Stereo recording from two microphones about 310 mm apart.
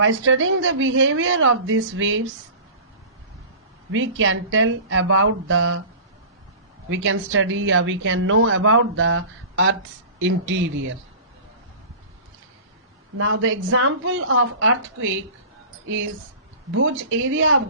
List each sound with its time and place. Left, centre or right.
0.0 s speech: right
3.9 s speech: right
6.9 s speech: right
13.1 s speech: right
16.7 s speech: right